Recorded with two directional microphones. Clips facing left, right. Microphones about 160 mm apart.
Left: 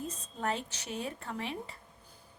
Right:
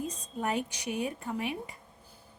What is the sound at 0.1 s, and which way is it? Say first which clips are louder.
A woman's voice: right 3 dB; 15° right (ahead or behind).